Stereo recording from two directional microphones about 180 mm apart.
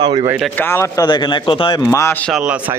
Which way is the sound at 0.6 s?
15° left (ahead or behind).